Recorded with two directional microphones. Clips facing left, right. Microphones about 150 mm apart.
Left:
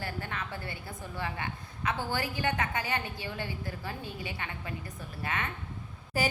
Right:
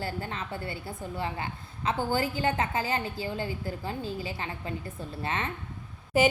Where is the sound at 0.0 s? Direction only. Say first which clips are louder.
Right 3 dB; 30° right (ahead or behind).